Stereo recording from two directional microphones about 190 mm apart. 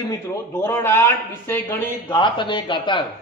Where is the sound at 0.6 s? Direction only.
10° left (ahead or behind).